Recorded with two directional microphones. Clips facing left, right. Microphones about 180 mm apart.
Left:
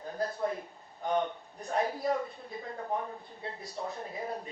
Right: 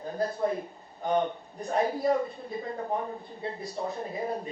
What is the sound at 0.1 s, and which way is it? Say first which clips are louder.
A woman's voice: right 4 dB; 25° right (ahead or behind).